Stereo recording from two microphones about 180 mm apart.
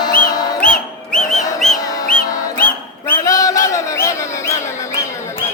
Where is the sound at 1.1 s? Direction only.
5° left (ahead or behind).